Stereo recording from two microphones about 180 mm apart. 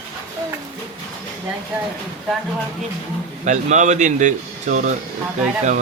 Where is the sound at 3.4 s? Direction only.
45° right (ahead or behind).